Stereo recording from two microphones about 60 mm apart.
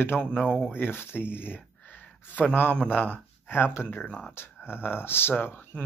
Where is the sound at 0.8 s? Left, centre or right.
Left.